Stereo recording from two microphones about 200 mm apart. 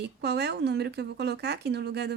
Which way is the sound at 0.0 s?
55° right (ahead or behind).